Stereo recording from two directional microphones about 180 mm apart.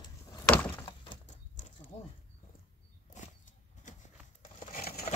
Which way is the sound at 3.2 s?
40° left (ahead or behind).